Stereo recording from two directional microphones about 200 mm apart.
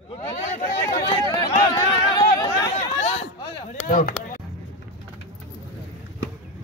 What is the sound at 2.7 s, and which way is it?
Chatter, 30° left (ahead or behind).